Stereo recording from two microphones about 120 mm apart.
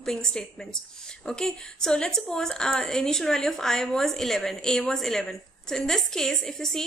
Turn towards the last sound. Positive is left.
turn(degrees=5)  # may be behind; listen again after turning